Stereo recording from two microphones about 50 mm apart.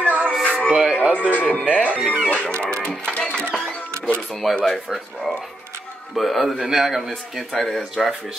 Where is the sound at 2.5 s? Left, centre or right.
Centre.